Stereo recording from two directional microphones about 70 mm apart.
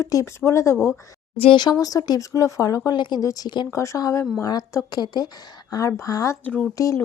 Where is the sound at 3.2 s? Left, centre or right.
Left.